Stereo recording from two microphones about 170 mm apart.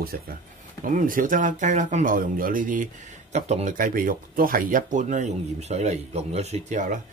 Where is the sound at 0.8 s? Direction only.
50° right (ahead or behind).